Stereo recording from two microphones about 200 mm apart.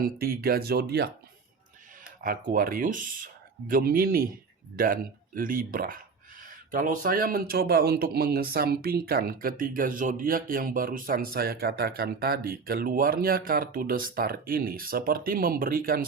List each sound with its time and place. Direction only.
0.0 s speech: 50° right (ahead or behind)
2.2 s speech: 45° right (ahead or behind)